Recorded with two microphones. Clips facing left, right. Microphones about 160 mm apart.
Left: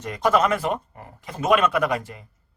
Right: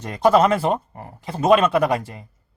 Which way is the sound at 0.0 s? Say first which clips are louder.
Right 5 dB; 30° right (ahead or behind).